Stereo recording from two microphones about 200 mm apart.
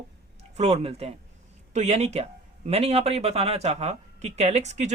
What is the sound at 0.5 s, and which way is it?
Speech, 30° right (ahead or behind).